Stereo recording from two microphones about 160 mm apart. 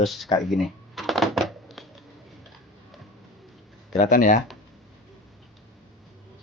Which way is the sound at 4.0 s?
55° left (ahead or behind).